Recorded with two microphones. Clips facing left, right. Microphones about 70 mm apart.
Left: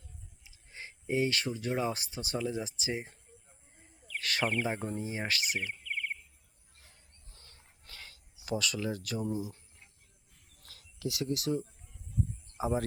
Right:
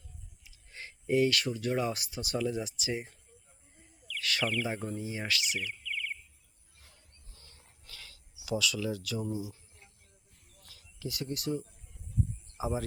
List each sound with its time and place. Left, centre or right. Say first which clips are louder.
0.4 s a sound: even; left
1.8 s speech: even; left
4.0 s speech: even; left
7.9 s cricket: left 1 dB; left
8.4 s speech: right 1 dB; left
10.6 s a sound: left 3 dB; left
12.5 s speech: left 2 dB; left